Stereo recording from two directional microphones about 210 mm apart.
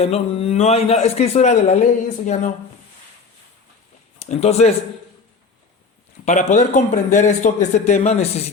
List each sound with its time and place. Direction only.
0.0 s a man's voice: 30° left (ahead or behind)
4.2 s speech: 30° left (ahead or behind)
6.2 s a man's voice: 35° left (ahead or behind)